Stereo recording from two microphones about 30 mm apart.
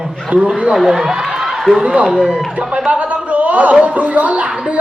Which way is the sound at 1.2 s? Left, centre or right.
Centre.